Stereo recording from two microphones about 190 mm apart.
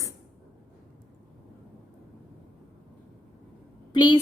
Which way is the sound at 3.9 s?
25° left (ahead or behind).